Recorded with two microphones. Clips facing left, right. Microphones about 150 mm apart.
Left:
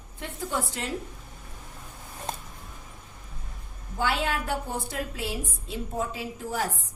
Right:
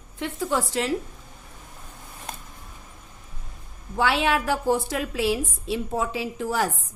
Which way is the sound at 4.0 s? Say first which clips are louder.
Right 5 dB; 90° right.